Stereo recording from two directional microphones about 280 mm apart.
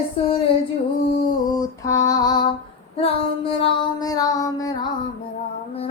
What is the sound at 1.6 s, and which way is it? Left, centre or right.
Female singing, centre.